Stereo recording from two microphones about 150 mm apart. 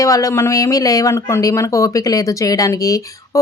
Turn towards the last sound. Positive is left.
turn(degrees=25)  # may be behind; listen again after turning